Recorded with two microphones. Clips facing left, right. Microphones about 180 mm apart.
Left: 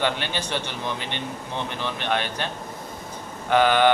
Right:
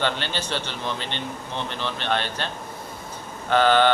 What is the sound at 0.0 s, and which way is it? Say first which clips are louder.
A man's voice: left 1 dB; 15° left (ahead or behind).